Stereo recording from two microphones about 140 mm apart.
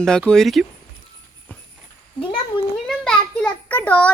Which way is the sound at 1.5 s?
10° left (ahead or behind).